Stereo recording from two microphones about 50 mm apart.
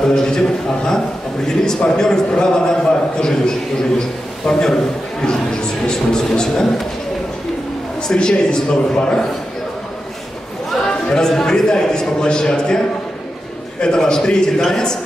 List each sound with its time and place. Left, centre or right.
0.0 s a man's voice: centre
5.9 s a man's voice: centre
8.1 s a man's voice: centre
10.7 s a sound: centre
11.1 s a man's voice: centre